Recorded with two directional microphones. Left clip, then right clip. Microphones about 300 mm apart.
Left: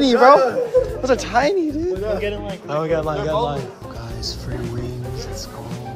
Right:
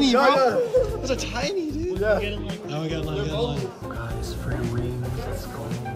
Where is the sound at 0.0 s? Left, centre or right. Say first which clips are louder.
Left 6 dB; centre.